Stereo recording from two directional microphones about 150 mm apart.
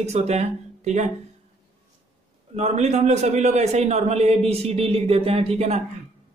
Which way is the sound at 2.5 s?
45° right (ahead or behind).